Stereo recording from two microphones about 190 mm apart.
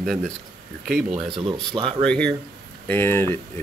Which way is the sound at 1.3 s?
25° right (ahead or behind).